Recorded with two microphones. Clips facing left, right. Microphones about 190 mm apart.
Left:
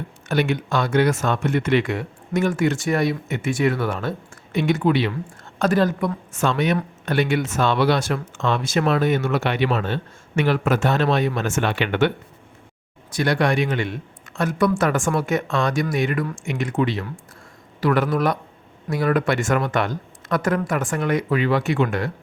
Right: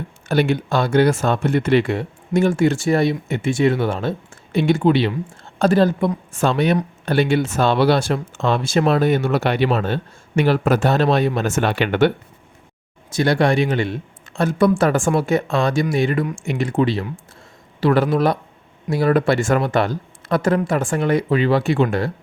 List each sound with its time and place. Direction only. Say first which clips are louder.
0.3 s speech: right 3 dB; 30° right (ahead or behind)